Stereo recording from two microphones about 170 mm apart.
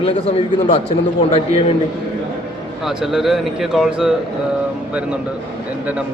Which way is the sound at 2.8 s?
5° right (ahead or behind).